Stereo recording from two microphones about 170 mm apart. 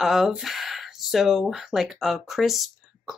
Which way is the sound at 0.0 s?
Centre (ahead or behind).